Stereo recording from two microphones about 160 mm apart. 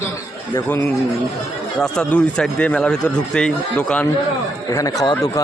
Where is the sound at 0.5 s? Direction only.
15° left (ahead or behind).